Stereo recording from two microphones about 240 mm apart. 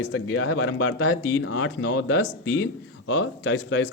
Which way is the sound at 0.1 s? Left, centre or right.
Left.